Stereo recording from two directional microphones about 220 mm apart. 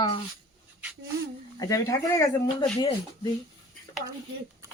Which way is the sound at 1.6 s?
15° left (ahead or behind).